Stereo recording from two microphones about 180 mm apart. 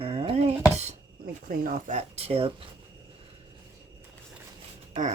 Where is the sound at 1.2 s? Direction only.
50° right (ahead or behind); by 2.5 s 30° right (ahead or behind).